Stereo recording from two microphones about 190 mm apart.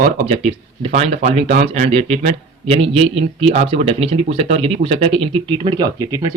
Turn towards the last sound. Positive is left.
turn(degrees=-20)  # may be behind; listen again after turning